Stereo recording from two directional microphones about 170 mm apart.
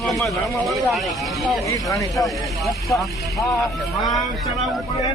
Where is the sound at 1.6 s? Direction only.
20° left (ahead or behind).